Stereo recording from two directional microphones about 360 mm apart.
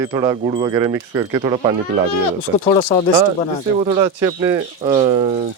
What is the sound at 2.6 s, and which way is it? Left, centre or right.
Speech, centre.